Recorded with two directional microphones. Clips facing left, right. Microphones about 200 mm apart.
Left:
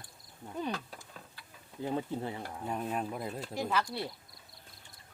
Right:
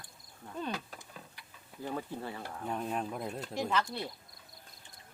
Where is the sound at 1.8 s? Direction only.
20° left (ahead or behind).